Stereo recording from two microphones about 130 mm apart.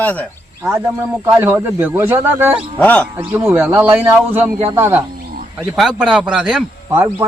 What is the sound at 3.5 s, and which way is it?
Speech, 15° right (ahead or behind).